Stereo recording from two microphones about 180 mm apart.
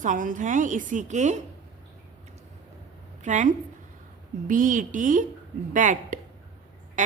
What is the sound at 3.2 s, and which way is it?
A woman's voice, 40° right (ahead or behind).